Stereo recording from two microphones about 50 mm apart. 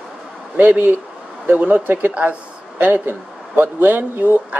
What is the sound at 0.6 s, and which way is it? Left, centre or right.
Speech, right.